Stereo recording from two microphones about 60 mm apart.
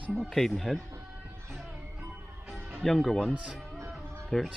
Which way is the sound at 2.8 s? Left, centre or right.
Centre.